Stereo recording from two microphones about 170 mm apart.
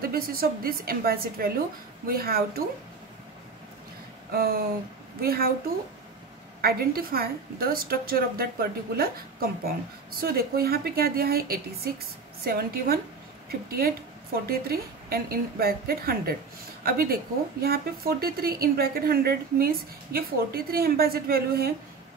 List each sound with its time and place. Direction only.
0.0 s a woman's voice: 60° right (ahead or behind)
4.3 s a woman's voice: 60° right (ahead or behind)
6.6 s a woman's voice: 65° right (ahead or behind)